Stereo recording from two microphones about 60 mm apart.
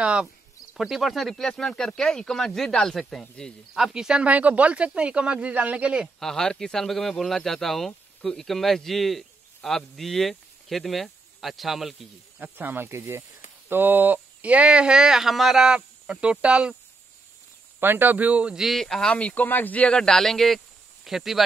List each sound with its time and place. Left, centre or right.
0.0 s speech: centre
0.7 s speech: centre
3.7 s speech: centre
4.3 s speech: right
6.1 s speech: centre
12.4 s speech: right
13.7 s speech: right; by 16.7 s centre
17.7 s speech: right
18.5 s speech: centre
19.4 s speech: left; by 21.4 s centre